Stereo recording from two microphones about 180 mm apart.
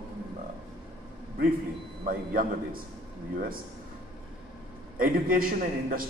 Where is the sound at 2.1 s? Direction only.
50° right (ahead or behind).